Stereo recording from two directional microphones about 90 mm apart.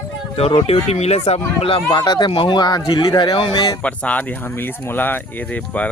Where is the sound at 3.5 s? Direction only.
50° left (ahead or behind).